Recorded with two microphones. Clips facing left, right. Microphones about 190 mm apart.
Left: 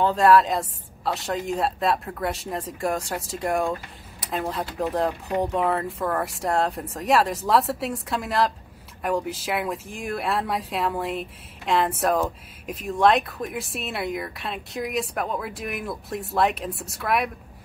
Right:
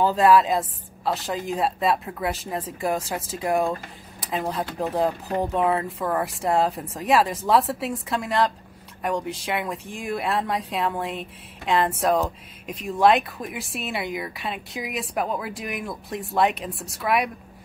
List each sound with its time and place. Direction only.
0.0 s speech: centre (ahead or behind)